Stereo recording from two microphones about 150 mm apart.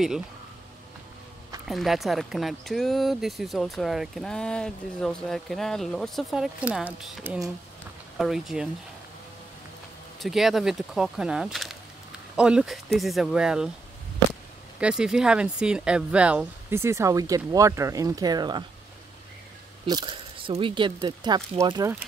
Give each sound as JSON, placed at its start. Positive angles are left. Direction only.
{"t": 1.7, "sound": "speech", "side_deg": 0}
{"t": 10.2, "sound": "speech", "side_deg": 0}
{"t": 14.8, "sound": "speech", "side_deg": -5}
{"t": 19.9, "sound": "speech", "side_deg": -30}